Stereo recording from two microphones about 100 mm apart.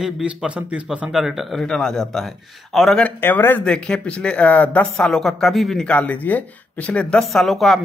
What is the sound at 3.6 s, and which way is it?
Speech, 10° left (ahead or behind).